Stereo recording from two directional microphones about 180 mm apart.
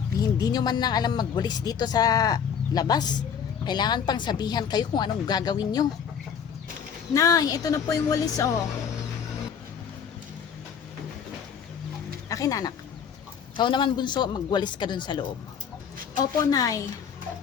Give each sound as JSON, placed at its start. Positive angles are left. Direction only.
{"t": 0.2, "sound": "speech", "side_deg": 20}
{"t": 7.1, "sound": "speech", "side_deg": 20}
{"t": 12.3, "sound": "speech", "side_deg": 20}
{"t": 16.4, "sound": "speech", "side_deg": 20}